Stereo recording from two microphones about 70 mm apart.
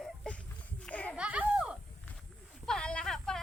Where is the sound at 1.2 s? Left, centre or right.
Centre.